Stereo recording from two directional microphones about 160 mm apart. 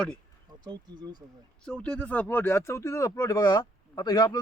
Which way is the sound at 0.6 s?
25° right (ahead or behind).